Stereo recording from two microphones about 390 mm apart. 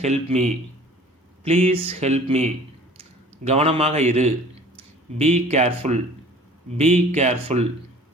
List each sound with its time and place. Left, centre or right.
0.0 s speech: centre